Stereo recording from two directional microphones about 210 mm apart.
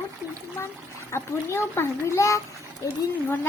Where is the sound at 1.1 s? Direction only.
10° left (ahead or behind).